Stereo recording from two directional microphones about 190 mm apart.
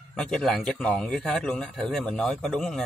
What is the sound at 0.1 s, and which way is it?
A man's voice, 5° left (ahead or behind).